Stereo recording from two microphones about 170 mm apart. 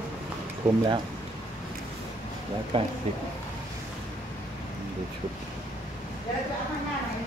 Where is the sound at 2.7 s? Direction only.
30° right (ahead or behind).